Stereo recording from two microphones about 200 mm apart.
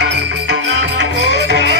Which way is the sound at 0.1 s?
60° right (ahead or behind).